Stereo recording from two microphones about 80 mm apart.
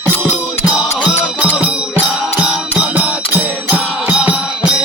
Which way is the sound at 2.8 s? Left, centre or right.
Centre.